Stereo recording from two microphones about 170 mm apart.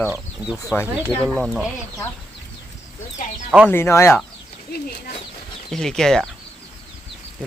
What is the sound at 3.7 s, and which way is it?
Speech, 15° left (ahead or behind).